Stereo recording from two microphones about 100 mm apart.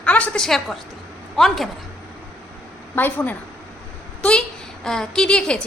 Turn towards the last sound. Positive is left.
turn(degrees=10)  # may be behind; listen again after turning